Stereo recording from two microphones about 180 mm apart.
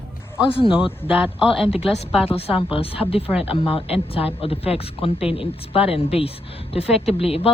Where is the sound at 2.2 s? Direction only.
35° left (ahead or behind).